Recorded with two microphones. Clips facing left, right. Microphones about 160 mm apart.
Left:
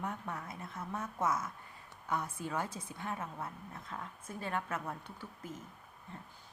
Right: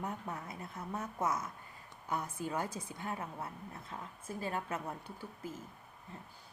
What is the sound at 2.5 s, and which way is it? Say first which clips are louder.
Speech: left 1 dB; 10° right (ahead or behind).